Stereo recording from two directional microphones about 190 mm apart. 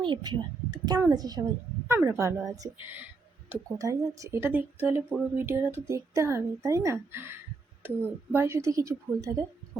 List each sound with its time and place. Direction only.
0.0 s a woman's voice: 25° right (ahead or behind)